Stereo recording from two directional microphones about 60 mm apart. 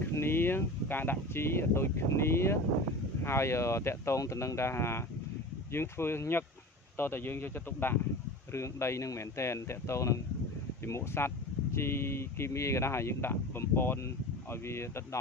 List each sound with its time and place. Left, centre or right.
0.1 s a man's voice: left
8.5 s speech: left